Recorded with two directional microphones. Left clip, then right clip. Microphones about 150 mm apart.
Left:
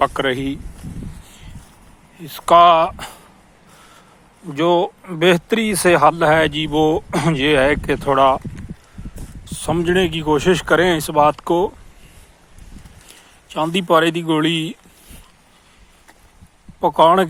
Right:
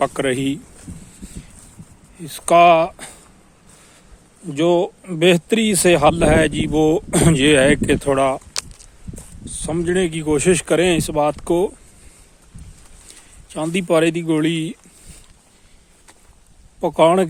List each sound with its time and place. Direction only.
0.0 s speech: 50° right (ahead or behind)
2.2 s speech: 40° right (ahead or behind)
4.5 s speech: 45° right (ahead or behind)
7.1 s speech: 75° right (ahead or behind); by 8.2 s 55° right (ahead or behind)
9.4 s speech: 10° right (ahead or behind); by 11.7 s 35° right (ahead or behind)
13.5 s speech: 25° right (ahead or behind)
16.8 s speech: 35° right (ahead or behind)